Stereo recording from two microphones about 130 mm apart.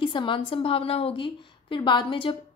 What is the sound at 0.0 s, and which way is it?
A woman's voice, 40° left (ahead or behind).